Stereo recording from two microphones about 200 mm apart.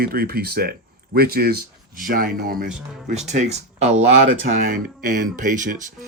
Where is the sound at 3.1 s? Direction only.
35° right (ahead or behind).